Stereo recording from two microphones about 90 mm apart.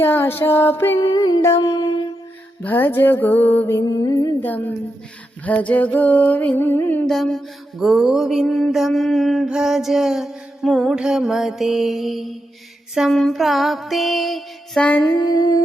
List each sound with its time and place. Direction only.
0.0 s music: 25° left (ahead or behind)
0.9 s music: 50° left (ahead or behind)
1.4 s humming: 35° left (ahead or behind)
1.7 s mantra: 55° left (ahead or behind)
2.6 s music: 20° left (ahead or behind)
3.8 s music: 45° left (ahead or behind)
4.4 s music: 20° left (ahead or behind)
7.1 s music: 5° left (ahead or behind)
15.3 s music: 50° left (ahead or behind)